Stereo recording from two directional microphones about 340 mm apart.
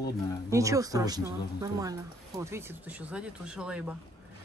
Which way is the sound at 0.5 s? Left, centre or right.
Centre.